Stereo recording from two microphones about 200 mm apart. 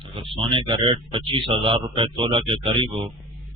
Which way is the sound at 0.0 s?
25° right (ahead or behind).